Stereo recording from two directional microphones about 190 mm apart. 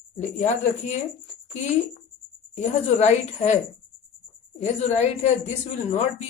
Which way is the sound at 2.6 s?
35° left (ahead or behind).